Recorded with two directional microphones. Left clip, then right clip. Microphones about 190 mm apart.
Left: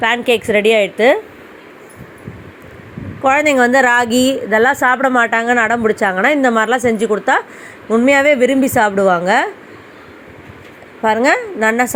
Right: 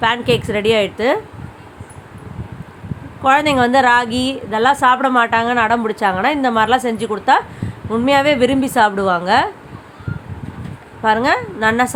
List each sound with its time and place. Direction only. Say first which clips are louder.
0.0 s a woman's voice: left 2 dB; 15° left (ahead or behind)
3.2 s a woman's voice: left 2 dB; 20° left (ahead or behind)
11.0 s a woman's voice: left 2 dB; 15° left (ahead or behind)